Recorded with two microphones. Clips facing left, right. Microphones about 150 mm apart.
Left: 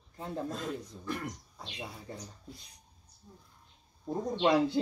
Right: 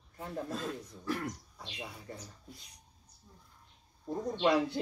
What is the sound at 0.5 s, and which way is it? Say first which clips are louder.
Speech: left 1 dB; 5° right (ahead or behind).